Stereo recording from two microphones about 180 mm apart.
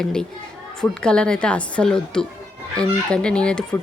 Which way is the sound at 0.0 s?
5° left (ahead or behind).